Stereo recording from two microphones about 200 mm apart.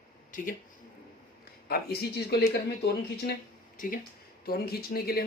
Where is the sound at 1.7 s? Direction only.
50° left (ahead or behind).